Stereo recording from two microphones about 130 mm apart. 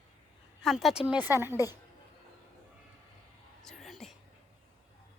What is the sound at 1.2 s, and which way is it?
Speech, 15° right (ahead or behind).